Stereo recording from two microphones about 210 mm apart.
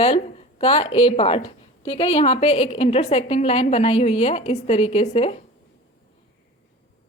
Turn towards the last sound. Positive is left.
turn(degrees=30)  # may be behind; listen again after turning